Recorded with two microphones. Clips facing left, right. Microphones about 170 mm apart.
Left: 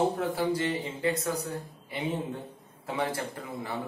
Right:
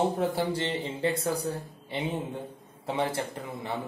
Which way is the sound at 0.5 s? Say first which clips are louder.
Even; 30° right (ahead or behind).